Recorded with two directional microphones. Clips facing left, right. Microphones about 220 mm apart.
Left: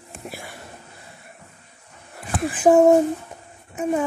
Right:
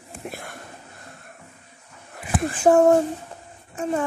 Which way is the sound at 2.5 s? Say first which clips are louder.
Left 2 dB; 15° left (ahead or behind).